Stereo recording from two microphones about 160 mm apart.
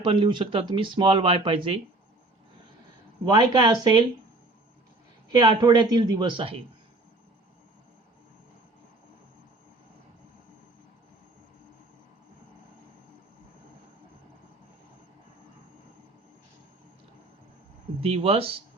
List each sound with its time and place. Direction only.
0.0 s speech: 30° right (ahead or behind)
3.2 s speech: 25° right (ahead or behind)
5.3 s speech: 25° right (ahead or behind)
18.0 s speech: 40° right (ahead or behind)